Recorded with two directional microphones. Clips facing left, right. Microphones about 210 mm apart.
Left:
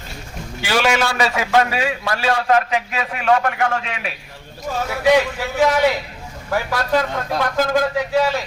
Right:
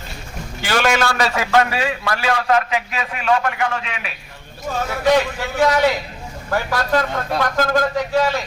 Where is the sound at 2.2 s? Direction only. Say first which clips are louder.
Left 1 dB; 30° left (ahead or behind).